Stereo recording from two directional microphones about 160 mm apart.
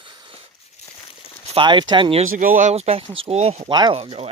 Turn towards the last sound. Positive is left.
turn(degrees=-40)  # may be behind; listen again after turning